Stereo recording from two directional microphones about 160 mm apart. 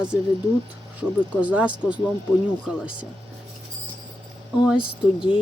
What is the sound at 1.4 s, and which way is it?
Speech, 10° right (ahead or behind).